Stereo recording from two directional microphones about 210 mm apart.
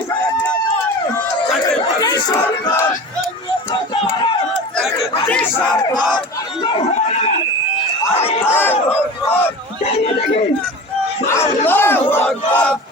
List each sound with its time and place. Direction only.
1.8 s crowd: 20° left (ahead or behind)
3.7 s run: 20° left (ahead or behind)
5.3 s battle cry: 5° left (ahead or behind)
6.1 s chatter: 25° left (ahead or behind)
8.4 s battle cry: 10° left (ahead or behind)
11.3 s battle cry: 10° left (ahead or behind)